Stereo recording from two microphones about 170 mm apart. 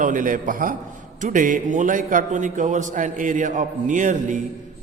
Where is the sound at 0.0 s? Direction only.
50° right (ahead or behind).